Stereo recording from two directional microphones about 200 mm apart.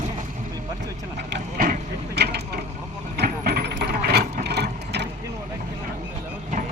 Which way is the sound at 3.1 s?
50° right (ahead or behind).